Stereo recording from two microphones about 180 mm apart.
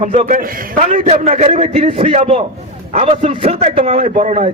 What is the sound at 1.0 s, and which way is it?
A man's voice, 35° right (ahead or behind).